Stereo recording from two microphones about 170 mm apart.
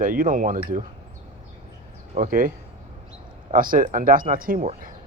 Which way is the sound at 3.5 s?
55° right (ahead or behind).